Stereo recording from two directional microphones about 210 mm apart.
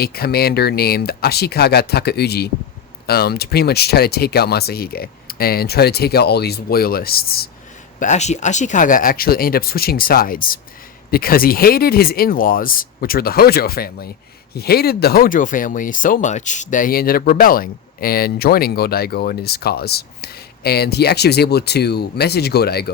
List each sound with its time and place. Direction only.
0.0 s speech: 45° left (ahead or behind)
7.9 s speech: 35° left (ahead or behind)